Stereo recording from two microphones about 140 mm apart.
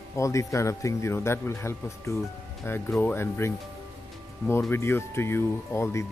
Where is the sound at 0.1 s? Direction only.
20° left (ahead or behind).